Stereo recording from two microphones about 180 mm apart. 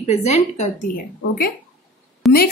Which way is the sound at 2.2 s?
Centre (ahead or behind).